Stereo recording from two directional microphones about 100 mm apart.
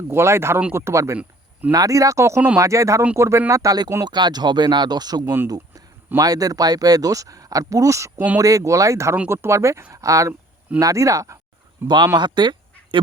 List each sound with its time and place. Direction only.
0.1 s speech: 25° right (ahead or behind)
4.0 s speech: 45° right (ahead or behind)
5.2 s speech: 20° right (ahead or behind)
5.5 s speech: 40° right (ahead or behind); by 11.9 s 20° right (ahead or behind)
12.1 s speech: 50° right (ahead or behind)